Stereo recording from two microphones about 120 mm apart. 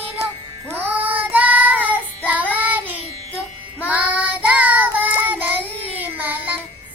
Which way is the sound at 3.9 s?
10° right (ahead or behind).